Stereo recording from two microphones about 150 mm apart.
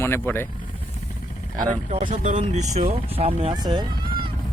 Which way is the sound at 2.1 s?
55° right (ahead or behind).